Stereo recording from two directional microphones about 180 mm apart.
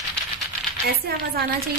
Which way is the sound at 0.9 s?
60° right (ahead or behind).